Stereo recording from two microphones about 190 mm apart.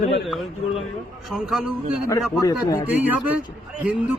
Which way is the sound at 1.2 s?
Centre (ahead or behind).